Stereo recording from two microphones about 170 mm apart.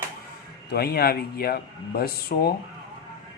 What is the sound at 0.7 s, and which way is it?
Speech, 65° left (ahead or behind).